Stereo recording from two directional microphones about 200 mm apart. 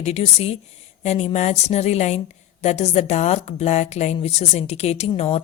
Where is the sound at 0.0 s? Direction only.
30° left (ahead or behind).